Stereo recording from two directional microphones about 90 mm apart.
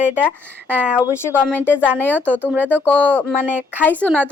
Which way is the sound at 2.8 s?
20° left (ahead or behind).